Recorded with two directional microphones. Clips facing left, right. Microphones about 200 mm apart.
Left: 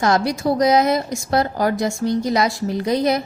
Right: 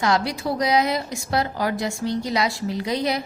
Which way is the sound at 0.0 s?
45° left (ahead or behind).